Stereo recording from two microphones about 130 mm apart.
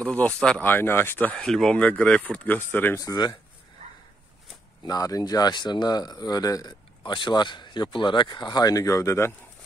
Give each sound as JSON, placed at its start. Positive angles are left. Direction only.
{"t": 0.0, "sound": "speech", "side_deg": 10}
{"t": 3.0, "sound": "speech", "side_deg": 30}
{"t": 4.8, "sound": "speech", "side_deg": 30}